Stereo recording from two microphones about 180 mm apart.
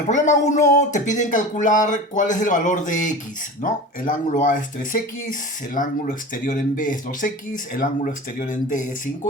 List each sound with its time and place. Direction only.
0.1 s speech: 40° left (ahead or behind)